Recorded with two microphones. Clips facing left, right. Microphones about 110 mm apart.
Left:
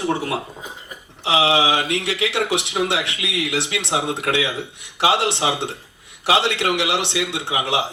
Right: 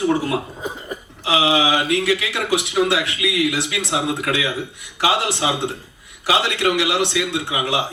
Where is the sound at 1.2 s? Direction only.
25° left (ahead or behind).